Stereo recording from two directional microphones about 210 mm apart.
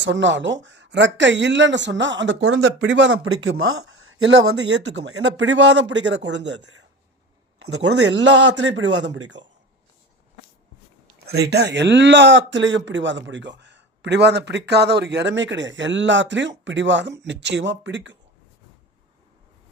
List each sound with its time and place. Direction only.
0.0 s speech: 60° right (ahead or behind)
7.8 s speech: 55° right (ahead or behind)
11.3 s speech: 50° right (ahead or behind)